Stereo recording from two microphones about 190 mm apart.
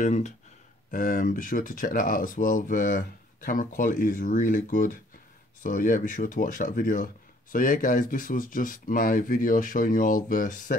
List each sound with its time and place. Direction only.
0.0 s speech: 40° left (ahead or behind)